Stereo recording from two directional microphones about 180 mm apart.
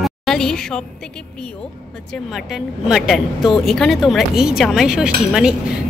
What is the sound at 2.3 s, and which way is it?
A woman's voice, centre (ahead or behind).